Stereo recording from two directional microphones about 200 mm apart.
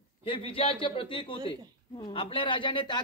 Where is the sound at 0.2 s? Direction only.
25° left (ahead or behind).